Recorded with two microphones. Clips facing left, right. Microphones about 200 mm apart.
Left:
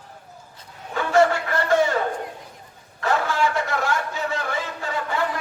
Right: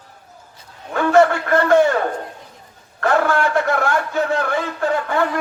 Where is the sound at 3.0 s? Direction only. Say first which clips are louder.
Right 5 dB; 55° right (ahead or behind).